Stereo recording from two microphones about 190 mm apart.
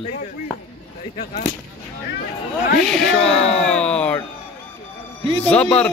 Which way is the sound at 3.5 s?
5° left (ahead or behind).